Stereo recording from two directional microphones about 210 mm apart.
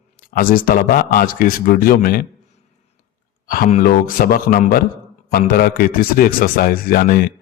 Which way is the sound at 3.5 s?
40° left (ahead or behind).